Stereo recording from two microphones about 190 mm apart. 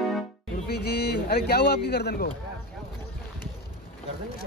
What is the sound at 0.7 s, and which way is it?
A man's voice, 55° left (ahead or behind).